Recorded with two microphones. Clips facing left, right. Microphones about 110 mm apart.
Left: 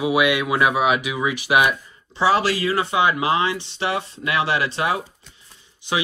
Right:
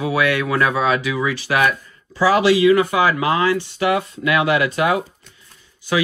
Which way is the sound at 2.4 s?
40° left (ahead or behind).